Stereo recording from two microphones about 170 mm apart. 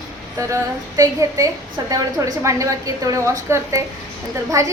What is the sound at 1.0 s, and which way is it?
A woman's voice, 20° right (ahead or behind).